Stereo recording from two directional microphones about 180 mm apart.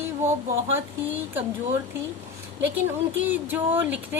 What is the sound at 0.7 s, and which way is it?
Speech, 10° right (ahead or behind).